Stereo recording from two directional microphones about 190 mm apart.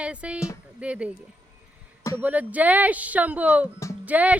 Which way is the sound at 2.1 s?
10° right (ahead or behind).